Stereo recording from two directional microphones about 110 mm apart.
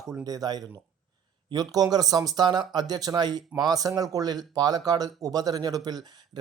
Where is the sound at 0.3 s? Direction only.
35° right (ahead or behind).